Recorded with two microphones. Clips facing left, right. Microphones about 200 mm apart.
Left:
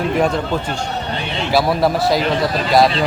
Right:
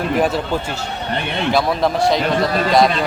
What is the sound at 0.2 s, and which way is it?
Speech, 5° right (ahead or behind).